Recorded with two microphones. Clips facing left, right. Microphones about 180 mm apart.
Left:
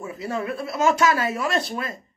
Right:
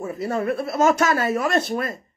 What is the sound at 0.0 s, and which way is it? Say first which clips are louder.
Speech: right 4 dB; 50° right (ahead or behind).